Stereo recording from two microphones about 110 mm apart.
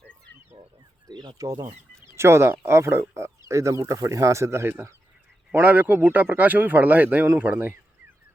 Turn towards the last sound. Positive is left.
turn(degrees=-15)  # may be behind; listen again after turning